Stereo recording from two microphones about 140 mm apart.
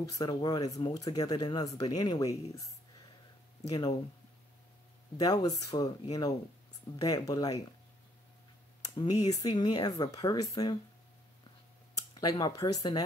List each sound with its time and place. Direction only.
0.0 s speech: 25° left (ahead or behind)
3.7 s speech: 30° left (ahead or behind)
5.1 s speech: 25° left (ahead or behind)
8.8 s speech: 30° left (ahead or behind)
12.1 s speech: 30° left (ahead or behind)